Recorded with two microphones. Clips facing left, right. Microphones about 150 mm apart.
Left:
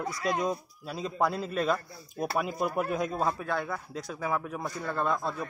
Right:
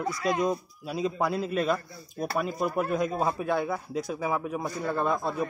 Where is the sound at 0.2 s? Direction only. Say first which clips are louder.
Right 2 dB; centre (ahead or behind).